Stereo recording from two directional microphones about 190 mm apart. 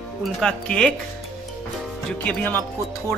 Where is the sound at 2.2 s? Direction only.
10° left (ahead or behind).